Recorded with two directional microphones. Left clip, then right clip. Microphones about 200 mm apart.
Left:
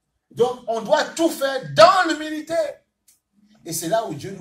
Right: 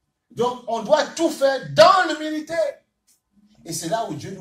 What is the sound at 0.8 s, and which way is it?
Speech, 20° left (ahead or behind).